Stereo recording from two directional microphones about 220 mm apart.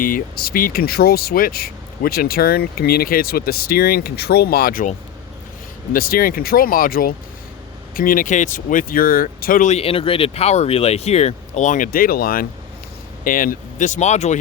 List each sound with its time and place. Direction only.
0.0 s speech: 40° left (ahead or behind)